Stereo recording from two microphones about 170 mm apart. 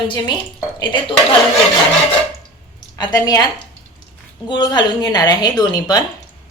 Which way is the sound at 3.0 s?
25° left (ahead or behind).